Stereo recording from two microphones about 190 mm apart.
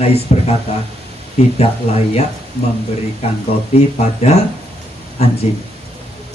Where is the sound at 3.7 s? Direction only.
35° left (ahead or behind).